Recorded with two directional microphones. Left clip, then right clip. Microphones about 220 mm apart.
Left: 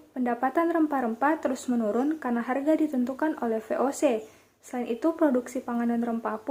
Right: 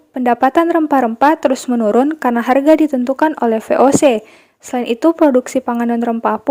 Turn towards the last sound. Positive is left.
turn(degrees=-45)  # may be behind; listen again after turning